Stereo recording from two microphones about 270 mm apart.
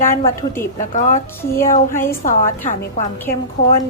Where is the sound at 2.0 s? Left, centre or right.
Left.